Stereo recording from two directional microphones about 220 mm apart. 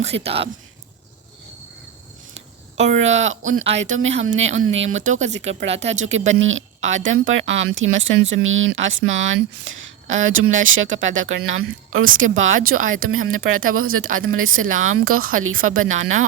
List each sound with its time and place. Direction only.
0.0 s speech: 30° right (ahead or behind)
2.9 s speech: 60° right (ahead or behind)
4.9 s speech: 35° right (ahead or behind)
6.1 s speech: 60° right (ahead or behind)